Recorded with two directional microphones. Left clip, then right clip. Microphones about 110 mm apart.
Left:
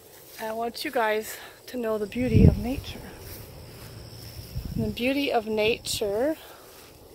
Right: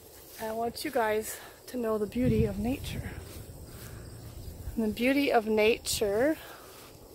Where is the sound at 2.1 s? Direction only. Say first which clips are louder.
Left 5 dB; 25° right (ahead or behind).